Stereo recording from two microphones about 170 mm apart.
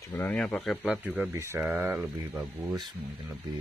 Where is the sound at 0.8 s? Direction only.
10° right (ahead or behind).